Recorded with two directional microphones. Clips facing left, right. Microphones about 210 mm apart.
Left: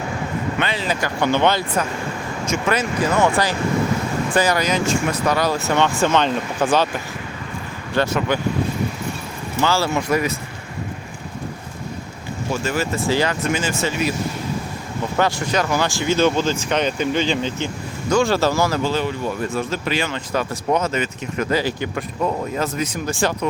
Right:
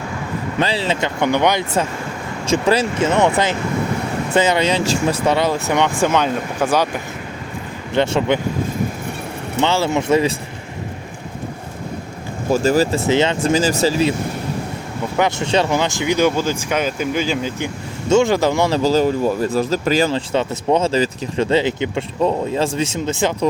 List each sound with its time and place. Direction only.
0.6 s speech: 30° right (ahead or behind)
2.5 s speech: 30° right (ahead or behind); by 6.8 s 10° right (ahead or behind)
7.9 s speech: 25° right (ahead or behind)
9.6 s speech: 20° right (ahead or behind)
12.5 s speech: 40° right (ahead or behind)
13.1 s speech: 25° right (ahead or behind)
15.2 s speech: 25° right (ahead or behind); by 17.7 s 5° right (ahead or behind)
18.1 s speech: 20° right (ahead or behind)
18.8 s speech: 40° right (ahead or behind); by 23.5 s 20° right (ahead or behind)